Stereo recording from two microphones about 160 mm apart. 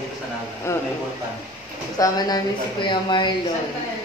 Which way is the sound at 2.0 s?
25° left (ahead or behind).